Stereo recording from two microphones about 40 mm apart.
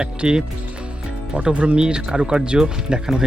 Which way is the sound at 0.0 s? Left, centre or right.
Centre.